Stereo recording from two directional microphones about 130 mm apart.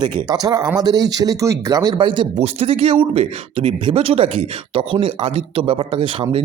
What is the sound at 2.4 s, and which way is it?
A man's voice, 50° right (ahead or behind).